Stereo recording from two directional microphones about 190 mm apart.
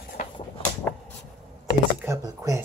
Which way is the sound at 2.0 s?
15° right (ahead or behind).